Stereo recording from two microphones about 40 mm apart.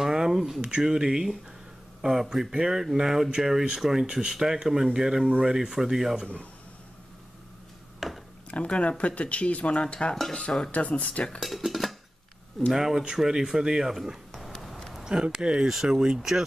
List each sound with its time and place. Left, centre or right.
0.0 s a sound: centre
0.6 s speech: centre
8.0 s a sound: centre
8.5 s speech: left
10.7 s speech: left
11.3 s speech: centre
14.3 s a sound: centre
15.3 s speech: right
15.6 s speech: centre